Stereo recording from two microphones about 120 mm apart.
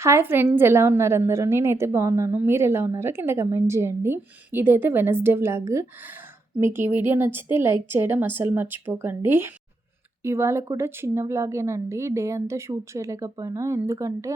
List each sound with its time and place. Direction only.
0.0 s a woman's voice: 20° right (ahead or behind)